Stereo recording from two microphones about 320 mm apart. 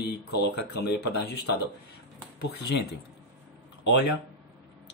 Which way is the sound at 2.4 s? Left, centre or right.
Left.